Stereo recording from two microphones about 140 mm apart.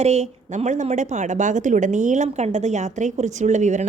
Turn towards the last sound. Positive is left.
turn(degrees=-60)  # may be behind; listen again after turning